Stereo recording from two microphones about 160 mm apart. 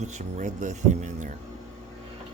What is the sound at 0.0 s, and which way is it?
Speech, 45° right (ahead or behind).